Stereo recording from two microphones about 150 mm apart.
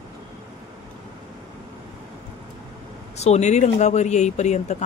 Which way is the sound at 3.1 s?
45° left (ahead or behind).